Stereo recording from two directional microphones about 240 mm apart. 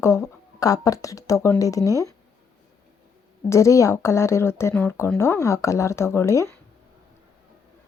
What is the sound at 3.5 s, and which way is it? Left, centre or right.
Speech, centre.